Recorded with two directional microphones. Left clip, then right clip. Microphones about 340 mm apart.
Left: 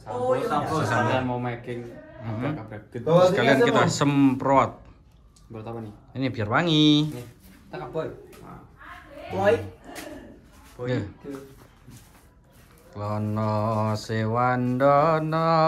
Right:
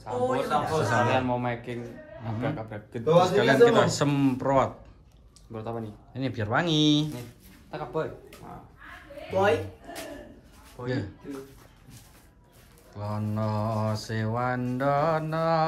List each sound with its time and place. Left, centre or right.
0.0 s speech: centre
2.2 s mantra: centre
3.0 s speech: centre
3.3 s mantra: centre
10.8 s mantra: centre
12.9 s mantra: centre